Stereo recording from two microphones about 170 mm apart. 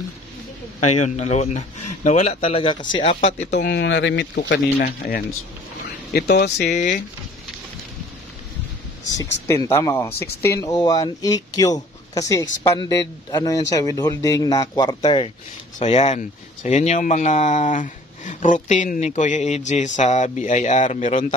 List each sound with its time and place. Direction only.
1.0 s speech: 40° left (ahead or behind)
3.2 s speech: 40° left (ahead or behind)
3.4 s speech: 80° left; by 5.2 s 60° left (ahead or behind)
6.1 s speech: 75° left (ahead or behind)
9.5 s speech: 15° left (ahead or behind)
15.8 s speech: 40° left (ahead or behind)